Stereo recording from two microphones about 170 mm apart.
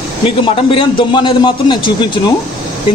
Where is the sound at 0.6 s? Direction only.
30° left (ahead or behind).